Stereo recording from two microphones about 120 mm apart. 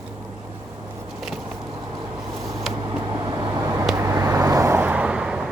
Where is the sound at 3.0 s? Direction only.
30° right (ahead or behind); by 5.5 s 5° right (ahead or behind).